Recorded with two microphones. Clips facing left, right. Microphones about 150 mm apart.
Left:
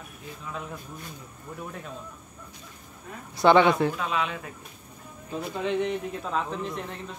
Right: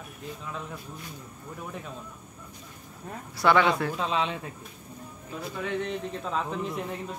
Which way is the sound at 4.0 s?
30° right (ahead or behind).